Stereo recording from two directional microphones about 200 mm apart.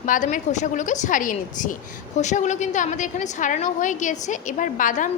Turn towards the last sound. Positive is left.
turn(degrees=40)  # may be behind; listen again after turning